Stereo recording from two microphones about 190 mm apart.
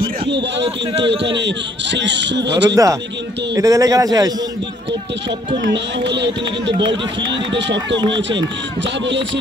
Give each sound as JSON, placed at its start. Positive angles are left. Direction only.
{"t": 0.3, "sound": "a man's voice", "side_deg": -65}
{"t": 2.7, "sound": "a man's voice", "side_deg": -15}
{"t": 5.7, "sound": "a man's voice", "side_deg": -65}
{"t": 9.0, "sound": "a man's voice", "side_deg": -70}